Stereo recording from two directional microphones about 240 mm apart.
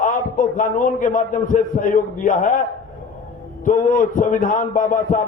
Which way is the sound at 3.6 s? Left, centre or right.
Left.